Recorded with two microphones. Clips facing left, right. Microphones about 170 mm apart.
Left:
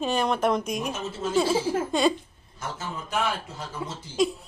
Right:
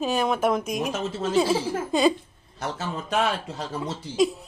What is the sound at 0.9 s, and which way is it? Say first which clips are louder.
Speech: right 3 dB; 80° right.